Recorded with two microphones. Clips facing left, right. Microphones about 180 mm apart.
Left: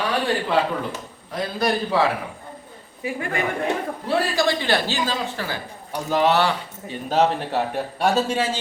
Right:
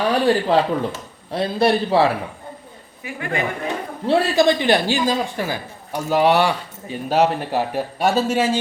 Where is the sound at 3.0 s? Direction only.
30° left (ahead or behind).